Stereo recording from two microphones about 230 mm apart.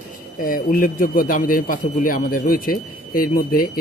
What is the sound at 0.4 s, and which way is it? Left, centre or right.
Speech, left.